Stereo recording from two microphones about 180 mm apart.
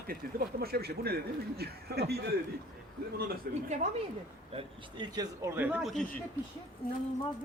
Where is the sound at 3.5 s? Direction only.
60° right (ahead or behind).